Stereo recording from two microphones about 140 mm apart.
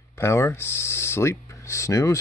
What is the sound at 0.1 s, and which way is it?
Speech, 20° left (ahead or behind).